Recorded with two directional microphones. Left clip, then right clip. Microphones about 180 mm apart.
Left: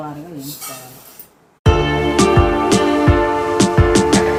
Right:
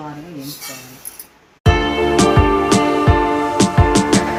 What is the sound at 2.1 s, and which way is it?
Music, centre (ahead or behind).